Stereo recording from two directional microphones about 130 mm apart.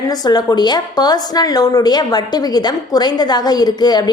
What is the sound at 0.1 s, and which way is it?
A woman's voice, 30° left (ahead or behind).